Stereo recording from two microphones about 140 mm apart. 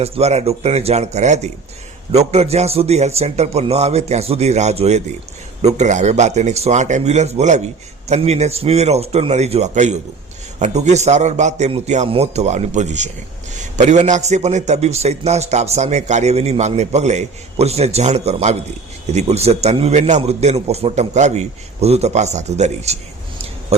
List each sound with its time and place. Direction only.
0.0 s a man's voice: 50° right (ahead or behind)
12.0 s a man's voice: 45° right (ahead or behind)